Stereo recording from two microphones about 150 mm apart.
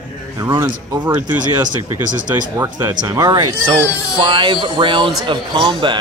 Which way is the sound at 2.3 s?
25° right (ahead or behind).